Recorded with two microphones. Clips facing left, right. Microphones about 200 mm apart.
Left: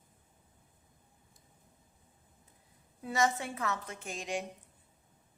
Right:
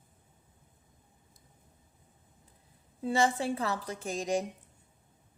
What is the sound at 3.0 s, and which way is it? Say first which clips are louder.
A woman's voice: right 3 dB; 30° right (ahead or behind).